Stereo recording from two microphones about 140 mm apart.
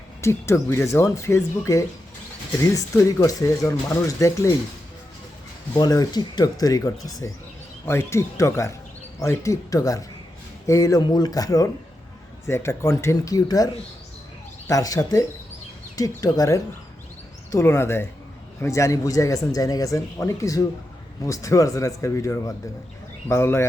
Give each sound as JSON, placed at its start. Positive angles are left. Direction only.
{"t": 0.2, "sound": "speech", "side_deg": 20}
{"t": 5.7, "sound": "speech", "side_deg": 30}
{"t": 14.7, "sound": "speech", "side_deg": 25}